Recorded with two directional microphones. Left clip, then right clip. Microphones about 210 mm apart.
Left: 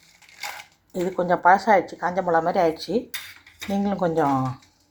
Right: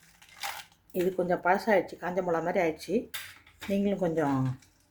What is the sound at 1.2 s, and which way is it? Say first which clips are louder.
Speech: left 11 dB; 5° right (ahead or behind).